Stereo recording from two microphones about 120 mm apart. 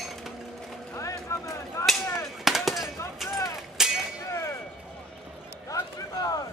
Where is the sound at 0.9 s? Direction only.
25° left (ahead or behind).